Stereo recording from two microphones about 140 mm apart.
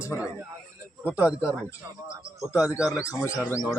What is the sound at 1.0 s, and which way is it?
Speech, 10° right (ahead or behind).